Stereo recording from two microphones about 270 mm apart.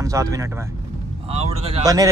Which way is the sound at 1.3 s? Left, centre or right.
Right.